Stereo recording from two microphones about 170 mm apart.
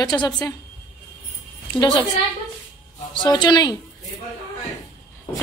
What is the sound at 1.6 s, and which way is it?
A woman's voice, 25° left (ahead or behind).